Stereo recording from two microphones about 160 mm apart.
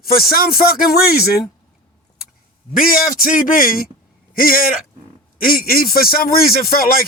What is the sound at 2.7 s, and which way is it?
A man's voice, 60° left (ahead or behind).